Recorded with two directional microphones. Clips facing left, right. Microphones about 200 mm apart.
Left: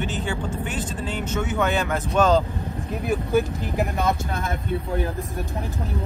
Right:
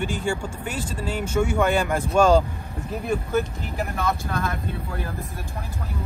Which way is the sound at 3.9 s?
25° left (ahead or behind).